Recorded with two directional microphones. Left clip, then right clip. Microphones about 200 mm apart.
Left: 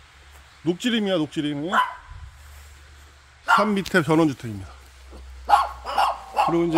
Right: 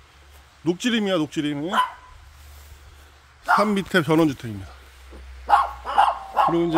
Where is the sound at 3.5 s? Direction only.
Centre (ahead or behind).